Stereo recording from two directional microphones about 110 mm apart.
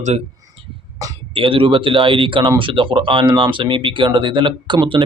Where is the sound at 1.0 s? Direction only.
30° right (ahead or behind).